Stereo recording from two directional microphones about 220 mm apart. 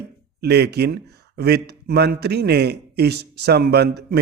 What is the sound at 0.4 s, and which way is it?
A man's voice, 45° right (ahead or behind).